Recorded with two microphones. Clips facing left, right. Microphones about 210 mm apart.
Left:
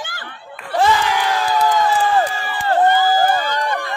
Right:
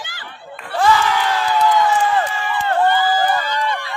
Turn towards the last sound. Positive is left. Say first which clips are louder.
# left 1 dB
turn(degrees=50)  # may be behind; listen again after turning